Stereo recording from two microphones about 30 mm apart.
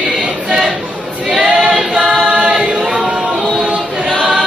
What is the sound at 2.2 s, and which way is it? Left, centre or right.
Choir, right.